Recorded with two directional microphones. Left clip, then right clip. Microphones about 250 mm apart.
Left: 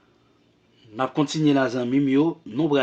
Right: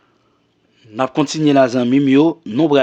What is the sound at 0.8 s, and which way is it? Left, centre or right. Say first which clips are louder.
Speech: right 6 dB; right.